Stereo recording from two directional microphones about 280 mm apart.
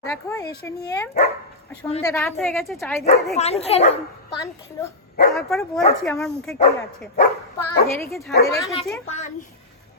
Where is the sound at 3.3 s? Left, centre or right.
Left.